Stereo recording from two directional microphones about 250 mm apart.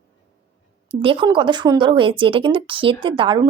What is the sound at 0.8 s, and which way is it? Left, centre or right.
A woman's voice, right.